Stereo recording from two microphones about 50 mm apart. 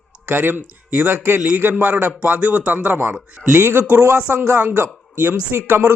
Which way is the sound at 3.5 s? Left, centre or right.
Right.